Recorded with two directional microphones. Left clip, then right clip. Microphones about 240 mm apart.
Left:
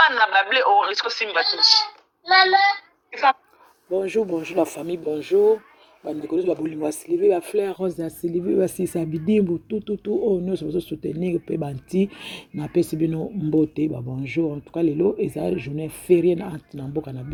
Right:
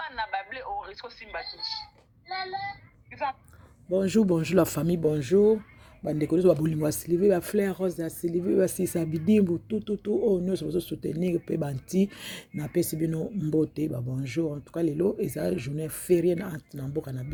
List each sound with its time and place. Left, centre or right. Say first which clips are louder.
0.0 s speech: left 16 dB; left
3.9 s speech: left 2 dB; centre